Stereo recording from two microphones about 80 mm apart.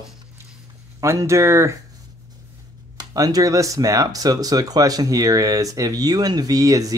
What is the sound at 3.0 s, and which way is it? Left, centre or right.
Speech, right.